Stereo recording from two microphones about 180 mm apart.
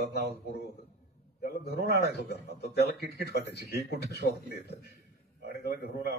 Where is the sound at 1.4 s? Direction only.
60° left (ahead or behind).